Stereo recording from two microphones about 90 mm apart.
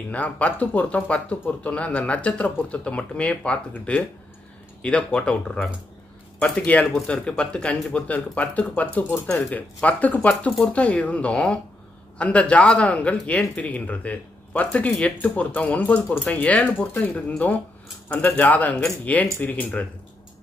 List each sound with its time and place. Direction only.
0.1 s speech: 15° left (ahead or behind)